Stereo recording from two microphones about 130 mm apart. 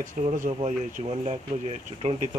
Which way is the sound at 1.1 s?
50° right (ahead or behind).